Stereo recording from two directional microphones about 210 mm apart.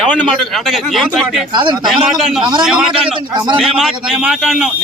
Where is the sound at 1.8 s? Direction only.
Centre (ahead or behind).